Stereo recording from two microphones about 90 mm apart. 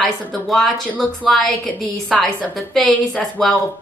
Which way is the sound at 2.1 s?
15° left (ahead or behind).